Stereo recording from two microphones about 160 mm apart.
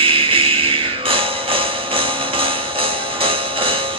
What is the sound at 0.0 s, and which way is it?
Music, 35° right (ahead or behind).